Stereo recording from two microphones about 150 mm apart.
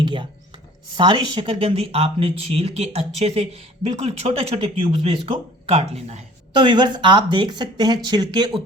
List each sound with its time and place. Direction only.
0.0 s speech: 35° right (ahead or behind)
6.5 s speech: 30° right (ahead or behind)